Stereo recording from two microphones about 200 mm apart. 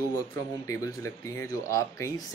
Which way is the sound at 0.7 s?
15° left (ahead or behind).